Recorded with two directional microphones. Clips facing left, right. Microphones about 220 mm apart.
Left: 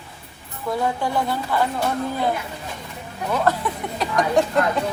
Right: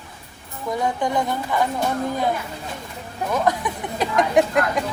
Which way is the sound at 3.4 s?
15° right (ahead or behind).